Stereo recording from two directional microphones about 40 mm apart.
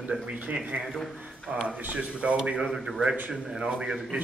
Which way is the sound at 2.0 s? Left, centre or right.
Right.